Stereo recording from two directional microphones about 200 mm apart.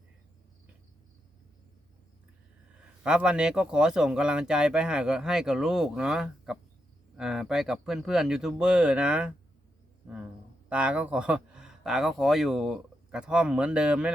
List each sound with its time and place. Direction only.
3.0 s speech: 5° right (ahead or behind)
10.7 s speech: 5° right (ahead or behind)